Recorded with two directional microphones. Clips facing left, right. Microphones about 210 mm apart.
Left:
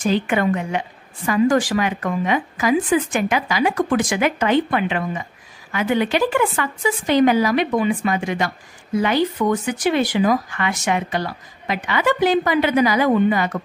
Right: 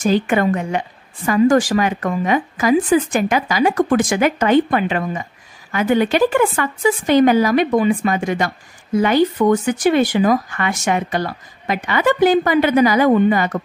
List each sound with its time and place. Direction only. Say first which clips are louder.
0.0 s a woman's voice: right 3 dB; 45° right (ahead or behind)